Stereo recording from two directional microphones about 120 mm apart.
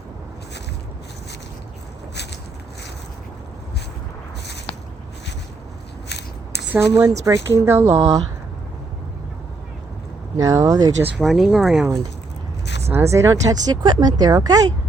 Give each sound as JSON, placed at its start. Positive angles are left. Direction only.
{"t": 6.7, "sound": "speech", "side_deg": -25}
{"t": 10.3, "sound": "speech", "side_deg": -25}
{"t": 11.2, "sound": "speech", "side_deg": 0}
{"t": 12.9, "sound": "speech", "side_deg": -20}